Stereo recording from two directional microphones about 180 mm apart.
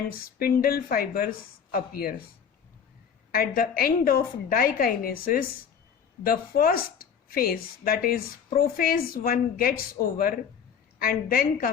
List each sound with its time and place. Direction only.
0.1 s a woman's voice: 55° left (ahead or behind)
3.3 s a woman's voice: 55° left (ahead or behind)